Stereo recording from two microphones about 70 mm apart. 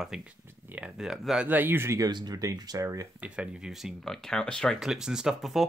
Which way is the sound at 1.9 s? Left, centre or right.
Right.